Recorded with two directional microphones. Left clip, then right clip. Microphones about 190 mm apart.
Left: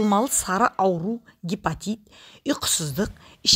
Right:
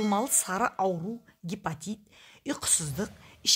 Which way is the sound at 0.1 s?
30° left (ahead or behind).